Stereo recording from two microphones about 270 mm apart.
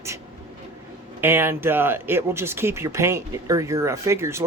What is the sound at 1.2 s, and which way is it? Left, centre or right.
Speech, centre.